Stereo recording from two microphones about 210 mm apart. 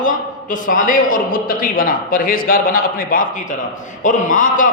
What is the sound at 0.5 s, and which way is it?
A man's voice, 40° left (ahead or behind).